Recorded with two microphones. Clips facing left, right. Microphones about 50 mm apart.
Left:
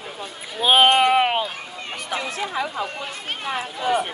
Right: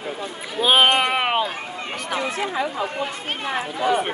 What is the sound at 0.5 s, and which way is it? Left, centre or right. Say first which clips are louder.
Speech: left 1 dB; centre.